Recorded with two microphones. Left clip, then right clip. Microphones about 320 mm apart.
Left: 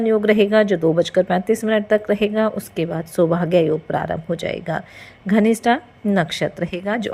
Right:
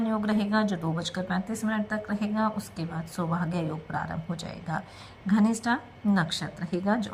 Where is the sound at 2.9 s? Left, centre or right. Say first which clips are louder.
Left 14 dB; left.